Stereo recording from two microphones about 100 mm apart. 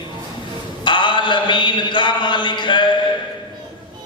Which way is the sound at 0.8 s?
50° left (ahead or behind).